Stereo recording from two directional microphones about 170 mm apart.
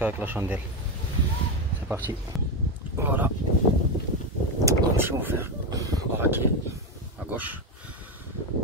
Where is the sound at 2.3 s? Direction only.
Centre (ahead or behind).